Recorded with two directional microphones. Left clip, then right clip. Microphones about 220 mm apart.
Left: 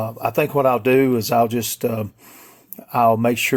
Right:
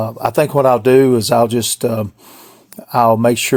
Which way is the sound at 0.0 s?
40° right (ahead or behind).